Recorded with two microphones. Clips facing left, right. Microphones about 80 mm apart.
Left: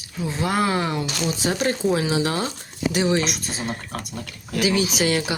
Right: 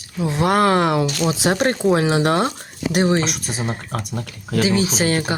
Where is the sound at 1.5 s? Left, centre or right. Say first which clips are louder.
Right 3 dB; right.